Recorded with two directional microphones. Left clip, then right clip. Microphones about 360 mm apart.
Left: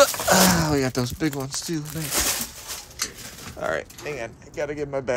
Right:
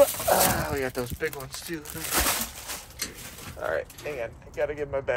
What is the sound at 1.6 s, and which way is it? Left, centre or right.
Speech, centre.